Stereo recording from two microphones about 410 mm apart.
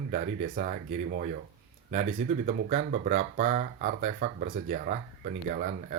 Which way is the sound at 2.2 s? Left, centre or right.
Centre.